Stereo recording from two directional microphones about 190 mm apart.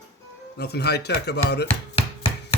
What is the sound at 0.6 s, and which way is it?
Speech, 60° left (ahead or behind).